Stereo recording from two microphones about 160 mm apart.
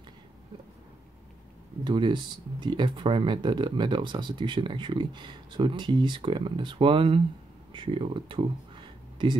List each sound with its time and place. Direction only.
1.9 s speech: 30° right (ahead or behind)